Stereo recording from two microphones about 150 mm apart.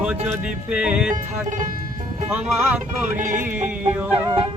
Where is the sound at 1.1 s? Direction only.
55° right (ahead or behind).